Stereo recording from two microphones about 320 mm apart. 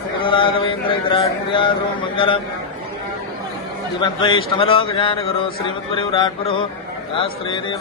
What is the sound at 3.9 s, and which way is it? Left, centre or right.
Speech, centre.